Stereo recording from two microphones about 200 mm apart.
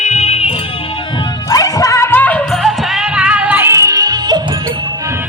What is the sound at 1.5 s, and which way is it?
Music, 15° left (ahead or behind).